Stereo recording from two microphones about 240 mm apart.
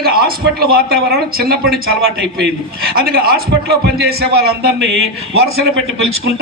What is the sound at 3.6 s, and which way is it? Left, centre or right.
A man's voice, right.